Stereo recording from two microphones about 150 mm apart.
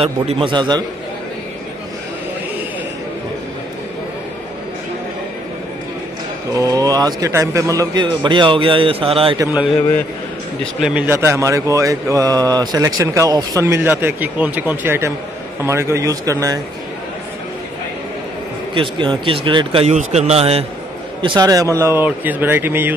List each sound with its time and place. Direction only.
0.0 s speech: 35° right (ahead or behind)
6.5 s speech: 25° right (ahead or behind)
10.6 s speech: 5° right (ahead or behind); by 16.5 s 20° right (ahead or behind)
18.8 s speech: 35° right (ahead or behind)
19.9 s speech: 50° right (ahead or behind)
21.2 s speech: 30° right (ahead or behind); by 22.9 s 15° right (ahead or behind)